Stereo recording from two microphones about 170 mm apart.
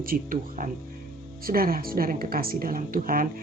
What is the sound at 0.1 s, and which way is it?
A woman's voice, 55° right (ahead or behind).